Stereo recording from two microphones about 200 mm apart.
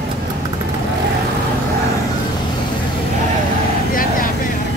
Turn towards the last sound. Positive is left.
turn(degrees=45)  # may be behind; listen again after turning